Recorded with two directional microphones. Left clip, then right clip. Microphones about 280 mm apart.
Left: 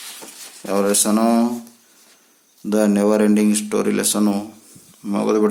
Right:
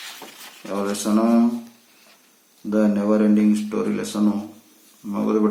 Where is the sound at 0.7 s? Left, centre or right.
Left.